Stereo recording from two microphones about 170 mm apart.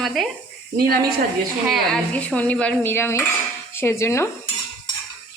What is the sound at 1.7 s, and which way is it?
Speech, 5° left (ahead or behind).